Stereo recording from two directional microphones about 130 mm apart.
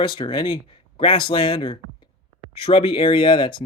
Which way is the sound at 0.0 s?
40° left (ahead or behind).